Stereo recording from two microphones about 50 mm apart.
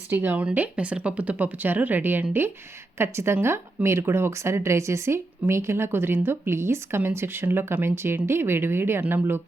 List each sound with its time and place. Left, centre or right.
0.1 s speech: right
3.0 s speech: right